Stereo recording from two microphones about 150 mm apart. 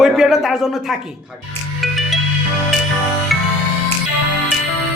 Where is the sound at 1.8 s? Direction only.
Centre (ahead or behind).